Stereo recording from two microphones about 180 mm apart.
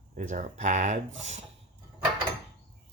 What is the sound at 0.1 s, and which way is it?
Speech, 45° right (ahead or behind).